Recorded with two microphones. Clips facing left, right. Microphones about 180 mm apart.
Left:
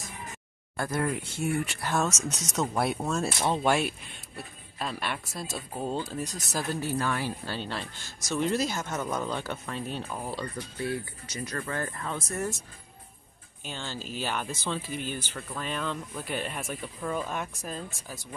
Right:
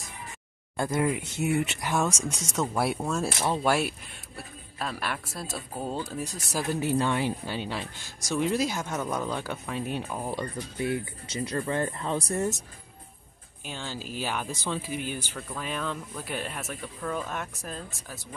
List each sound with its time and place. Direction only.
0.7 s speech: 20° right (ahead or behind)
2.5 s speech: 5° left (ahead or behind)
2.8 s speech: 5° right (ahead or behind); by 12.4 s 30° right (ahead or behind)
13.7 s speech: 5° right (ahead or behind)